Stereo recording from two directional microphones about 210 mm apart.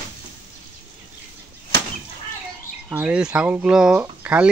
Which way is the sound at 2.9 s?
5° right (ahead or behind).